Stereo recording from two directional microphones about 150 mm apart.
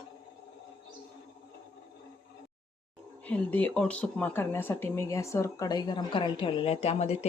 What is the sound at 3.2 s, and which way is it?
Speech, 10° left (ahead or behind).